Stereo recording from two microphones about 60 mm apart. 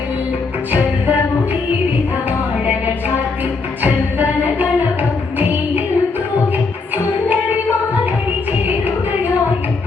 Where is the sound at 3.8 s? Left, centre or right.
Right.